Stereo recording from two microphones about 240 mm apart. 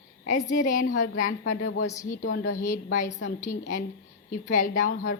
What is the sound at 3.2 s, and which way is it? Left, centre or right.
Speech, left.